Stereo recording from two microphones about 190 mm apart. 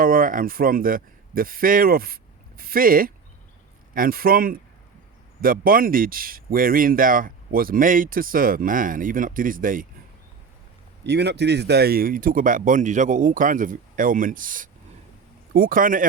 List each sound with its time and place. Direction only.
0.0 s speech: 50° right (ahead or behind)
11.0 s speech: 60° right (ahead or behind); by 16.0 s 45° right (ahead or behind)